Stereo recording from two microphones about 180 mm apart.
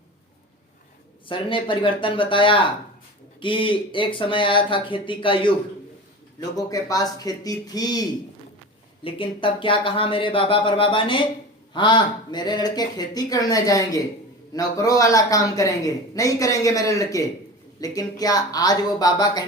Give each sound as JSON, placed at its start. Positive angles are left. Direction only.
{"t": 1.3, "sound": "a man's voice", "side_deg": 30}
{"t": 6.6, "sound": "a man's voice", "side_deg": 20}
{"t": 9.0, "sound": "a man's voice", "side_deg": 30}